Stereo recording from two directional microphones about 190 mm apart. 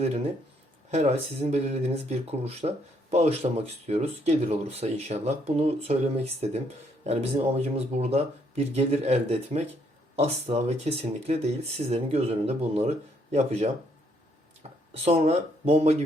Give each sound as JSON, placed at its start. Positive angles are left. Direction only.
{"t": 0.9, "sound": "speech", "side_deg": -35}
{"t": 14.6, "sound": "a sound", "side_deg": -35}
{"t": 15.0, "sound": "speech", "side_deg": -35}